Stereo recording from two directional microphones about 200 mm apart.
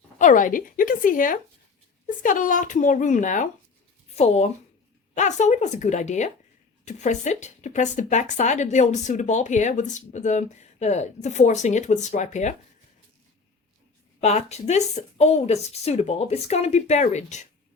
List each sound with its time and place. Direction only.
0.2 s a woman's voice: 40° left (ahead or behind)
14.2 s speech: 35° left (ahead or behind)